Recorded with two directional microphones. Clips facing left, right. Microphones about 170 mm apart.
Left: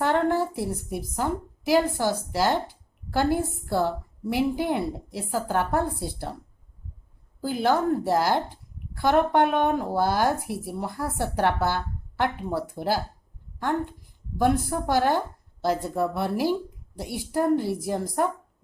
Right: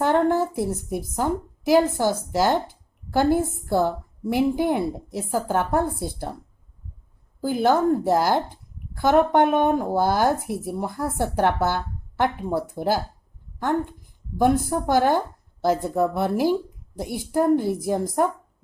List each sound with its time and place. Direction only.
0.0 s a woman's voice: 50° right (ahead or behind)
7.4 s a woman's voice: 50° right (ahead or behind)
14.3 s a woman's voice: 50° right (ahead or behind)